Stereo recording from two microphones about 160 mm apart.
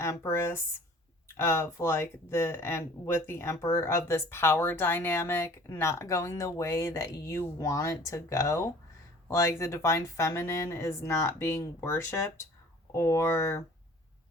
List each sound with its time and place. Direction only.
0.0 s speech: 15° left (ahead or behind)